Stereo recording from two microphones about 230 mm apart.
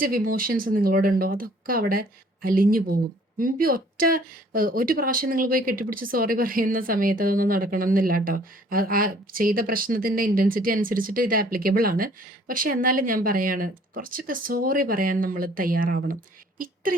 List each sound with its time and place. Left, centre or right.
0.0 s speech: right